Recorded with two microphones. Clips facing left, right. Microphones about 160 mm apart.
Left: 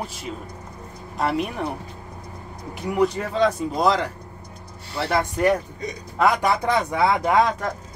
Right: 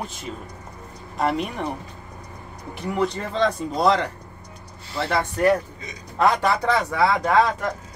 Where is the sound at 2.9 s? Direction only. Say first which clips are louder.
Left 3 dB; 10° left (ahead or behind).